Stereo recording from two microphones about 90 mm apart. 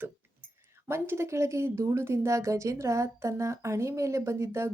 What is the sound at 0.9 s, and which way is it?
Speech, 30° right (ahead or behind).